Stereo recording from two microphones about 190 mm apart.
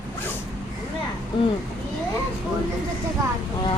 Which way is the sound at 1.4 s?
25° left (ahead or behind).